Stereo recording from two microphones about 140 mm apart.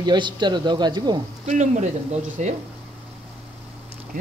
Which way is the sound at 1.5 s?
55° right (ahead or behind).